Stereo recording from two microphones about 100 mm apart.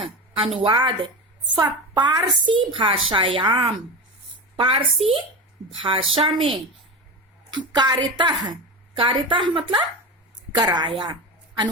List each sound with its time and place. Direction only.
0.0 s a sound: 70° right (ahead or behind)
0.6 s a woman's voice: 55° right (ahead or behind)
2.0 s a woman's voice: 45° right (ahead or behind); by 6.5 s 70° right (ahead or behind)
7.5 s a woman's voice: 45° right (ahead or behind)